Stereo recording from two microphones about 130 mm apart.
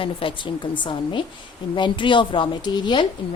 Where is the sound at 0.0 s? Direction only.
40° left (ahead or behind).